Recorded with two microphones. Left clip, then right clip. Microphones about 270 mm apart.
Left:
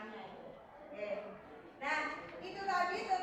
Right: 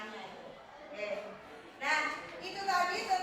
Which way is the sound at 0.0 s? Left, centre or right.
Centre.